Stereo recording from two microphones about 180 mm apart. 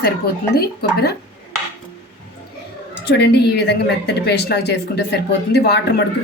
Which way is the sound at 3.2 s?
65° left (ahead or behind).